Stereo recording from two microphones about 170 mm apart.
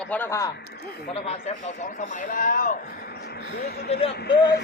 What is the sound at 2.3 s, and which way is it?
Speech, 50° left (ahead or behind).